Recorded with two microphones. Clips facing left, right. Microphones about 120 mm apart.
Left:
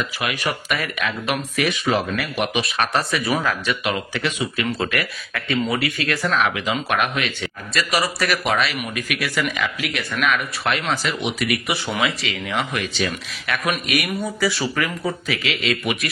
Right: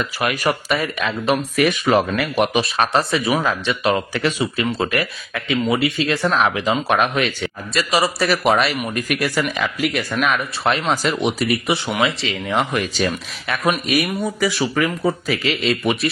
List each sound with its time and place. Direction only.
0.2 s speech: 40° right (ahead or behind)
0.7 s speech: 25° right (ahead or behind)
1.6 s speech: 45° right (ahead or behind); by 3.9 s 25° right (ahead or behind)
3.9 s speech: 40° right (ahead or behind)
8.5 s speech: 45° right (ahead or behind)
11.0 s speech: 40° right (ahead or behind)
12.5 s speech: 40° right (ahead or behind); by 15.1 s 20° right (ahead or behind)
15.2 s speech: 40° right (ahead or behind)